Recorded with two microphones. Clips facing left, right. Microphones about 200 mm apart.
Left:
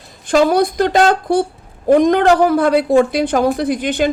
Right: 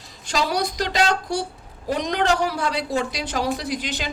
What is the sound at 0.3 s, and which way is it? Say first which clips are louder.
A woman's voice: left 11 dB; 55° left (ahead or behind).